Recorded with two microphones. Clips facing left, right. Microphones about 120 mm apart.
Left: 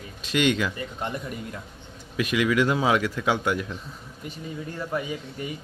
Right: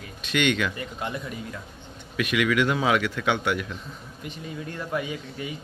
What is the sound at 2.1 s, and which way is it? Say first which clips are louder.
A man's voice: left 1 dB; 30° left (ahead or behind).